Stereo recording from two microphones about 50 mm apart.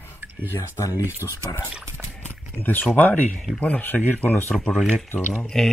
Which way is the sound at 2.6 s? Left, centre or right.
Left.